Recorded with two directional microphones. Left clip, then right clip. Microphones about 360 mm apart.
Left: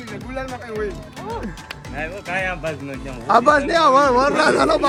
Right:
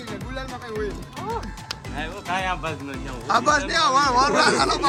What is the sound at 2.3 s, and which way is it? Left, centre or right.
A man's voice, centre.